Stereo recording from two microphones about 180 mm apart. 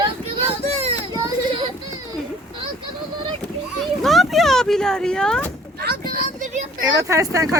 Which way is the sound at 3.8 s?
Centre (ahead or behind).